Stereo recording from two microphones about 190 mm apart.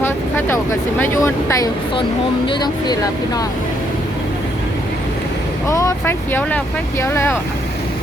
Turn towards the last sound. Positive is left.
turn(degrees=15)  # may be behind; listen again after turning